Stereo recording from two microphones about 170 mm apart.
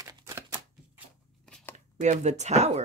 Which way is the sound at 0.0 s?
20° right (ahead or behind).